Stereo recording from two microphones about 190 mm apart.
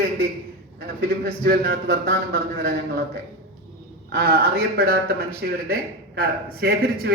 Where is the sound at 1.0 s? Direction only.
55° right (ahead or behind).